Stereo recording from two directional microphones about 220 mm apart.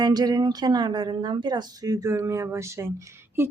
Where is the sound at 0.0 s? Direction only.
20° right (ahead or behind).